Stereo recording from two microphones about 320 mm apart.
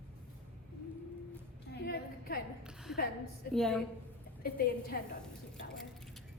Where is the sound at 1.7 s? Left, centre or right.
Left.